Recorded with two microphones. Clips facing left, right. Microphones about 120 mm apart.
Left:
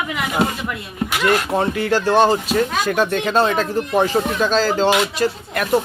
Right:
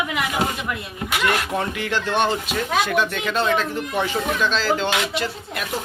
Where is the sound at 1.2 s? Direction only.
30° left (ahead or behind).